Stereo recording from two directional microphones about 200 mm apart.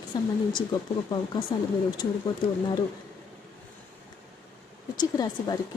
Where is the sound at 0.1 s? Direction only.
20° left (ahead or behind).